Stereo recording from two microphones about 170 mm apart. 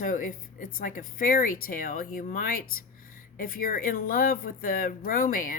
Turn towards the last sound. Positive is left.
turn(degrees=55)  # may be behind; listen again after turning